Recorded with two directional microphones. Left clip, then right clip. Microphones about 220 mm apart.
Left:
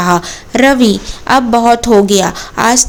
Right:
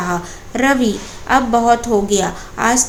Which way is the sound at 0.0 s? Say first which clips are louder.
Left 9 dB; 40° left (ahead or behind).